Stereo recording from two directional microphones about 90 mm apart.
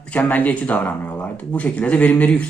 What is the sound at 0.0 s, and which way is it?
Speech, 15° left (ahead or behind).